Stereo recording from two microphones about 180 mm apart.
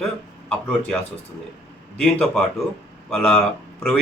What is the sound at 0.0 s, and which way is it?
Speech, 5° left (ahead or behind).